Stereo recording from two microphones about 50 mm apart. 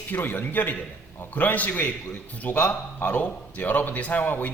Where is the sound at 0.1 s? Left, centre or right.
Left.